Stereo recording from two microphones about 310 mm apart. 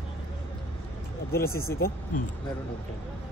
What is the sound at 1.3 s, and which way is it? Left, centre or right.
Speech, left.